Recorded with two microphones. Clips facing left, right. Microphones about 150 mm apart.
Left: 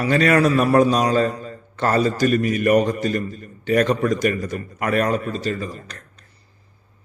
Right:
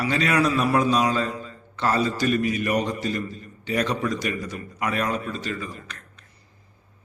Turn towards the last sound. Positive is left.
turn(degrees=40)  # may be behind; listen again after turning